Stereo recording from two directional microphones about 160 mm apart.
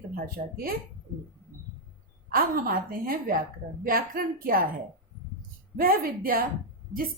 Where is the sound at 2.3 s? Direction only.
65° right (ahead or behind).